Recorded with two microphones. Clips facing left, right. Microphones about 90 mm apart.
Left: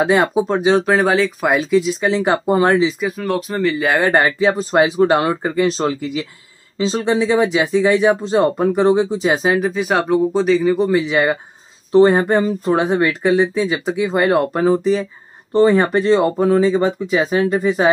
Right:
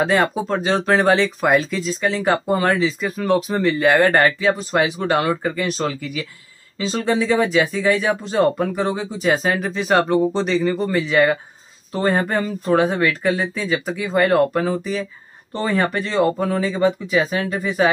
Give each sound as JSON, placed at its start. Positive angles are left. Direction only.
{"t": 0.0, "sound": "speech", "side_deg": 15}
{"t": 3.0, "sound": "speech", "side_deg": 5}
{"t": 4.1, "sound": "speech", "side_deg": 20}
{"t": 4.5, "sound": "speech", "side_deg": 30}